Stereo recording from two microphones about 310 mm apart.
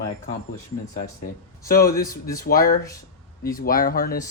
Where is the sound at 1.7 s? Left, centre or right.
Left.